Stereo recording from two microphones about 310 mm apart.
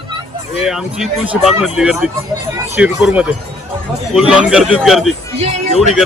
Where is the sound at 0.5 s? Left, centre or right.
Centre.